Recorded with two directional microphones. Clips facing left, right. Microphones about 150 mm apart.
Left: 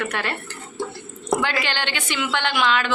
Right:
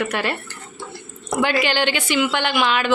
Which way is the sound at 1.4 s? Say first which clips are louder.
Right 10 dB; 10° right (ahead or behind).